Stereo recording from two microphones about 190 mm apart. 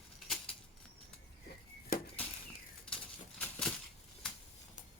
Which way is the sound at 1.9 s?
50° left (ahead or behind).